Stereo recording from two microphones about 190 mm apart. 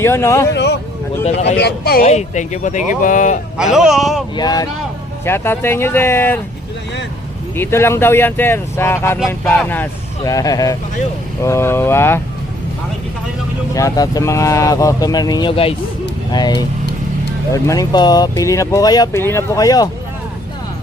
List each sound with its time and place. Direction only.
0.0 s speech: 15° left (ahead or behind)
0.5 s a sound: 60° left (ahead or behind)
1.5 s speech: 60° left (ahead or behind)
2.0 s speech: 40° left (ahead or behind)
3.6 s speech: centre (ahead or behind)
4.4 s speech: 20° left (ahead or behind)
7.5 s speech: 10° left (ahead or behind)
13.7 s speech: 20° left (ahead or behind)